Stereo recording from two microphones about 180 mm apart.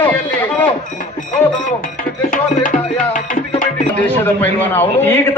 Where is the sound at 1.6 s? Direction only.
50° left (ahead or behind).